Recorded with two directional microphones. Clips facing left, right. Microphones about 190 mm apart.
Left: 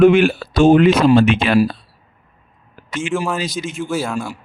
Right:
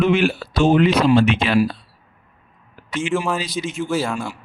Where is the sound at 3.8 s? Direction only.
5° left (ahead or behind).